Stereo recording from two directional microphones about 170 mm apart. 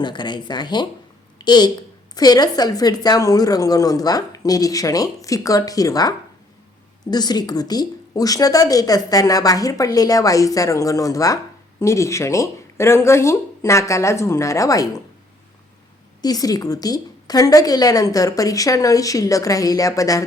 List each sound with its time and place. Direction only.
0.0 s a woman's voice: 25° left (ahead or behind)
16.2 s a woman's voice: 20° left (ahead or behind)